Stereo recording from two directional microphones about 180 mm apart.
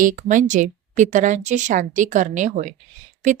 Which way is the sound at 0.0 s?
45° right (ahead or behind).